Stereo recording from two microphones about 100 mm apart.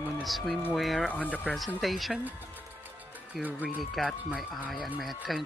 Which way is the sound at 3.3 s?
Centre (ahead or behind).